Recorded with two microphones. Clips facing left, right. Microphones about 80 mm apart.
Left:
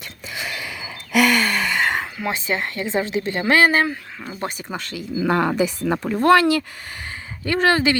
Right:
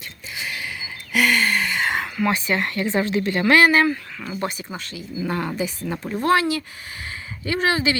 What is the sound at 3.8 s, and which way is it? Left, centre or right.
Speech, centre.